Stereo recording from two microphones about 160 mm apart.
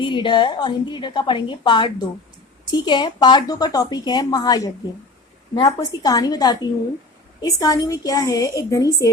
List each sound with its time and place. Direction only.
0.0 s a woman's voice: 30° left (ahead or behind)